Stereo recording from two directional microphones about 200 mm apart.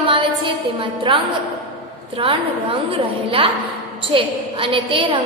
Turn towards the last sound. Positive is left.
turn(degrees=-25)  # may be behind; listen again after turning